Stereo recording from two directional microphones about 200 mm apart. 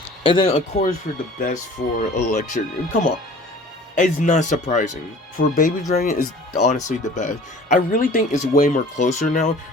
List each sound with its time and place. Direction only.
0.2 s speech: 25° left (ahead or behind)
2.0 s speech: 40° left (ahead or behind)